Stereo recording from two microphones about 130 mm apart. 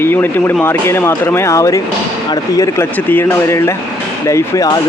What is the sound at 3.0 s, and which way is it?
Speech, 15° left (ahead or behind).